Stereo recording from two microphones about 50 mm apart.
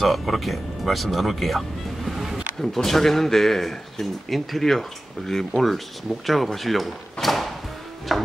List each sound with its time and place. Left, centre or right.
0.0 s speech: centre